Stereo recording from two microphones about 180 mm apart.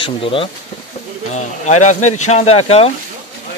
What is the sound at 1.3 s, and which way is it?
Speech, 40° left (ahead or behind).